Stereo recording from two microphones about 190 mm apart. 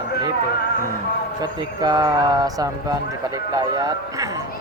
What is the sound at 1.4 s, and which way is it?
Speech, 20° right (ahead or behind).